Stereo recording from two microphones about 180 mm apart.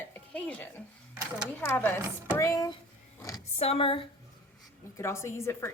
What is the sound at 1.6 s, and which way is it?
A woman's voice, 15° left (ahead or behind).